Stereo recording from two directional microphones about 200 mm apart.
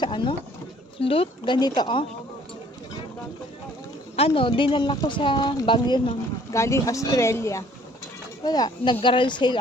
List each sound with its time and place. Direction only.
0.0 s a sound: 25° left (ahead or behind)
0.9 s speech: 25° left (ahead or behind)
4.2 s speech: 25° left (ahead or behind)